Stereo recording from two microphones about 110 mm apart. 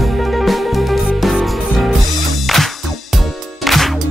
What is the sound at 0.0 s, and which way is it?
Music, centre (ahead or behind).